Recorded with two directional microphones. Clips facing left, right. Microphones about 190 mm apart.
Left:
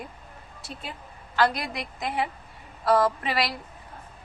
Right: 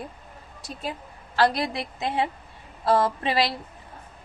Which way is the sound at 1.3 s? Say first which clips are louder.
Right 2 dB; 30° right (ahead or behind).